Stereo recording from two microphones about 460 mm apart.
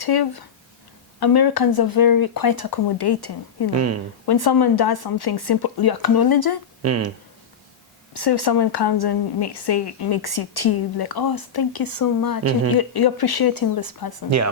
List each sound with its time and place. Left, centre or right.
0.0 s speech: left
3.8 s speech: right
4.3 s speech: left
6.8 s speech: right
8.1 s speech: left
14.3 s speech: right